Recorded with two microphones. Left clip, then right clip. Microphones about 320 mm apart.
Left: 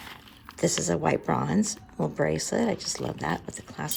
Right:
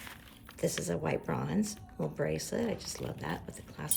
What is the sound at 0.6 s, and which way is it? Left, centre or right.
Speech, centre.